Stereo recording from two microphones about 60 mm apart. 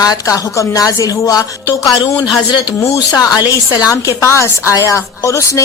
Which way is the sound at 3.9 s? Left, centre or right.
Left.